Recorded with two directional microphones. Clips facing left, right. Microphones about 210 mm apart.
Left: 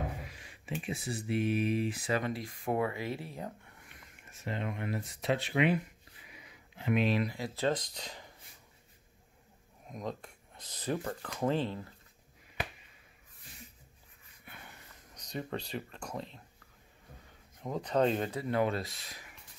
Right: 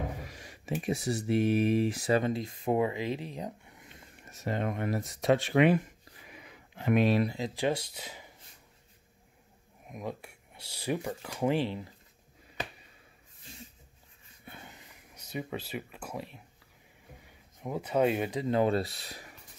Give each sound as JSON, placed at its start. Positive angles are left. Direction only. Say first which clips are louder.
{"t": 0.3, "sound": "speech", "louder": "right 5 dB", "side_deg": -40}
{"t": 2.2, "sound": "speech", "louder": "right 5 dB", "side_deg": -25}
{"t": 4.2, "sound": "speech", "louder": "right 5 dB", "side_deg": -40}
{"t": 7.2, "sound": "speech", "louder": "right 4 dB", "side_deg": -25}
{"t": 9.8, "sound": "speech", "louder": "right 1 dB", "side_deg": -10}
{"t": 14.4, "sound": "wheeze", "louder": "right 4 dB", "side_deg": -25}
{"t": 15.1, "sound": "speech", "louder": "right 1 dB", "side_deg": -5}
{"t": 17.6, "sound": "speech", "louder": "right 2 dB", "side_deg": -10}
{"t": 18.6, "sound": "speech", "louder": "right 4 dB", "side_deg": -35}